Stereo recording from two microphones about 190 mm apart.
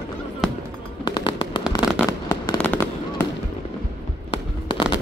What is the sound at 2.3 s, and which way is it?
Fireworks, 10° left (ahead or behind).